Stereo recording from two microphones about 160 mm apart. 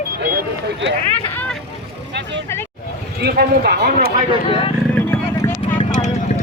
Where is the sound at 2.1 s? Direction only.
90° right.